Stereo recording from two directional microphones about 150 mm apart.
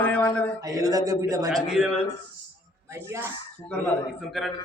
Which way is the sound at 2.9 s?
15° right (ahead or behind).